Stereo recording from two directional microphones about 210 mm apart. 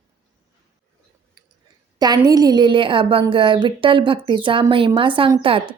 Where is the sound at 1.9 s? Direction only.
20° right (ahead or behind).